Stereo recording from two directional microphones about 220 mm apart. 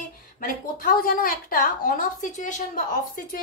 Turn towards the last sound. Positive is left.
turn(degrees=40)  # may be behind; listen again after turning